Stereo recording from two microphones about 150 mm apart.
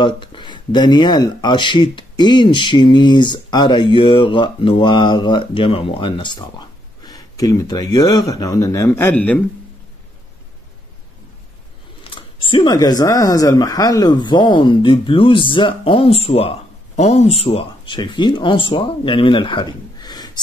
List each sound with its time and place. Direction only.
0.0 s speech: 30° left (ahead or behind); by 9.4 s 10° left (ahead or behind)
12.0 s a sound: 35° left (ahead or behind)
12.7 s speech: 25° left (ahead or behind)